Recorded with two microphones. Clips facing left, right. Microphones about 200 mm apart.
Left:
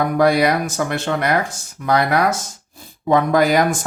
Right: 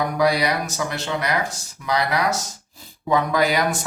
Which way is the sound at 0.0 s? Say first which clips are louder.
Left 5 dB; 50° left (ahead or behind).